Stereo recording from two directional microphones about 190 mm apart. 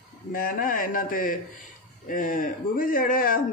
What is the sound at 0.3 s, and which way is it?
A man's voice, 50° left (ahead or behind).